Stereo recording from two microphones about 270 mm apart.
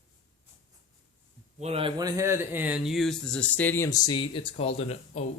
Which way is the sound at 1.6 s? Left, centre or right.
Right.